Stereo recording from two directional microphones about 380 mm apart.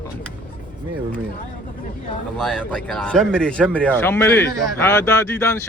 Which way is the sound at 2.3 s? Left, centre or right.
Centre.